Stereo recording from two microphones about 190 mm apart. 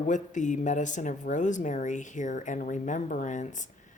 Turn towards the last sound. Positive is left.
turn(degrees=40)  # may be behind; listen again after turning